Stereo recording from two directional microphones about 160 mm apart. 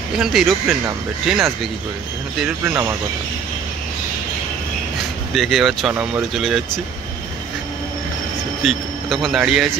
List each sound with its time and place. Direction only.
0.2 s speech: centre (ahead or behind)
2.6 s speech: 15° right (ahead or behind)
5.3 s speech: centre (ahead or behind)
8.6 s speech: centre (ahead or behind)